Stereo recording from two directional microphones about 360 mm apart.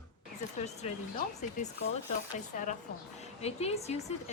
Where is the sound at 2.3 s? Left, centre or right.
Left.